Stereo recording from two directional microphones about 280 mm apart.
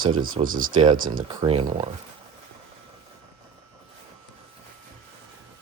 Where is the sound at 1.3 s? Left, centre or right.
Centre.